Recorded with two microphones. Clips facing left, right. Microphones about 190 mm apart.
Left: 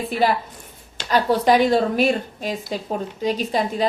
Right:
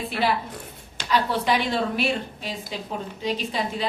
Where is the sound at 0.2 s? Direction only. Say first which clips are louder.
Left 4 dB; 45° left (ahead or behind).